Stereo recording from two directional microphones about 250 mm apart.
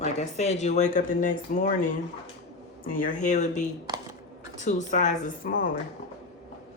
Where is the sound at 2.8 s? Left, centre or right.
Left.